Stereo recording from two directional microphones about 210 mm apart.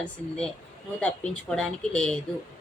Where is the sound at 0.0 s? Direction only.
5° left (ahead or behind).